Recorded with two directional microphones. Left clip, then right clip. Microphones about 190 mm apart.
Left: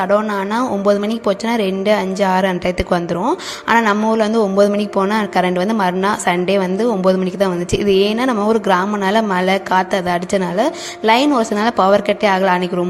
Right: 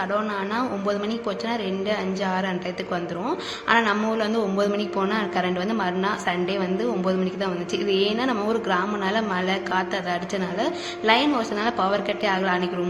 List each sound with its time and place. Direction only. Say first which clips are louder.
0.1 s speech: left 9 dB; 45° left (ahead or behind)